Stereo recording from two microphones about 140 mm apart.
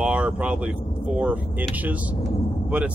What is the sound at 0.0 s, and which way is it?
Speech, 10° right (ahead or behind).